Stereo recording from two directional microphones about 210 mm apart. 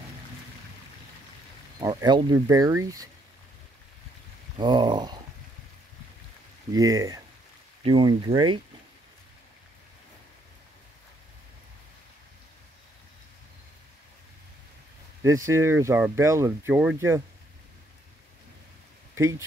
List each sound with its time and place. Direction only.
1.8 s speech: 20° right (ahead or behind)
4.6 s speech: 20° right (ahead or behind)
6.7 s speech: 15° right (ahead or behind)
15.2 s speech: 15° right (ahead or behind)
19.1 s speech: 15° right (ahead or behind)